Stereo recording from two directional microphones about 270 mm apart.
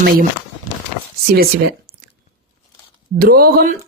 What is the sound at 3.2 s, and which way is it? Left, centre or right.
Speech, right.